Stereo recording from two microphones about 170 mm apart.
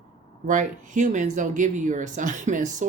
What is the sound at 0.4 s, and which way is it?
Speech, 50° right (ahead or behind).